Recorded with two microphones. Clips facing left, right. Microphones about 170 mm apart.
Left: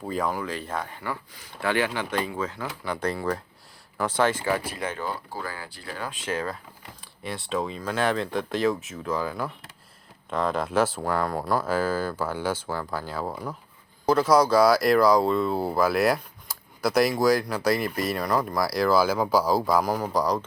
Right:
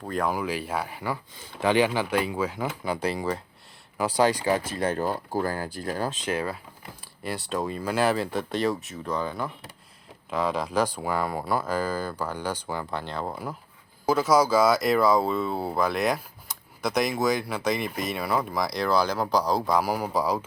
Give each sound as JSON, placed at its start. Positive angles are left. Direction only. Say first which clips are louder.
{"t": 0.1, "sound": "speech", "louder": "right 1 dB", "side_deg": 0}
{"t": 0.3, "sound": "speech", "louder": "right 2 dB", "side_deg": -10}
{"t": 4.7, "sound": "speech", "louder": "right 5 dB", "side_deg": -35}
{"t": 6.1, "sound": "speech", "louder": "right 1 dB", "side_deg": -15}
{"t": 7.0, "sound": "speech", "louder": "right 2 dB", "side_deg": 0}